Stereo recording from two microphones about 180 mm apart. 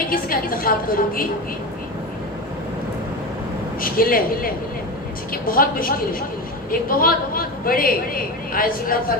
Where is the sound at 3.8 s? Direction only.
55° left (ahead or behind).